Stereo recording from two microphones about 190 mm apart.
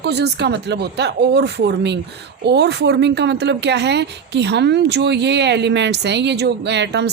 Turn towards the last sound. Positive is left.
turn(degrees=-65)  # may be behind; listen again after turning